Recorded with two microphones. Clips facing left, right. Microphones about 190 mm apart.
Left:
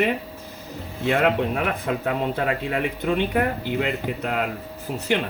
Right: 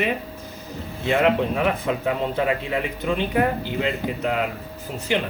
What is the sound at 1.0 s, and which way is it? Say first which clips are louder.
Speech: right 1 dB; 55° left (ahead or behind).